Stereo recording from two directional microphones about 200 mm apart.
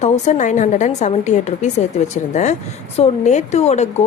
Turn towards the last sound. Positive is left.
turn(degrees=35)  # may be behind; listen again after turning